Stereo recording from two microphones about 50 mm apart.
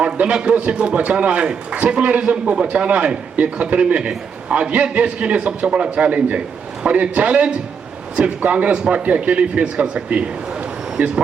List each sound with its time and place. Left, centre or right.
0.0 s a man's voice: right
11.0 s a man's voice: right